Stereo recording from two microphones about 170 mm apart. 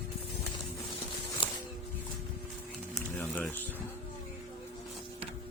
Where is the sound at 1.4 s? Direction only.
30° left (ahead or behind).